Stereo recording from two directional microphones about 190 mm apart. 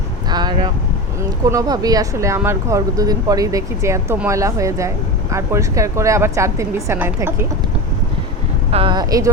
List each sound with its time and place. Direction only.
0.3 s vehicle: 20° right (ahead or behind)
1.5 s speech: 20° right (ahead or behind)
8.7 s speech: 25° right (ahead or behind)